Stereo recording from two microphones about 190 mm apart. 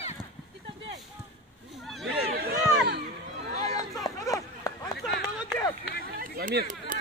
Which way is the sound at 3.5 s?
20° left (ahead or behind).